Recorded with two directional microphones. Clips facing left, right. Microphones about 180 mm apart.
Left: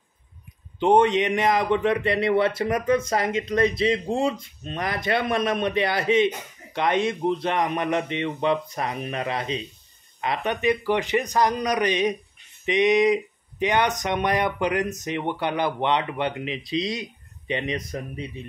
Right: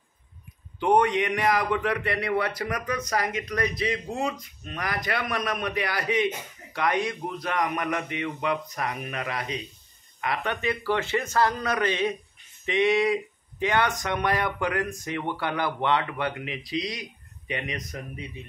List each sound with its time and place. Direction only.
0.7 s a man's voice: 25° left (ahead or behind)